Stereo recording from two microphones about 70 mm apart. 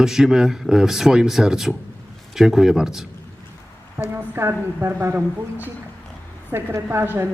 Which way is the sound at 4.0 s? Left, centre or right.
Right.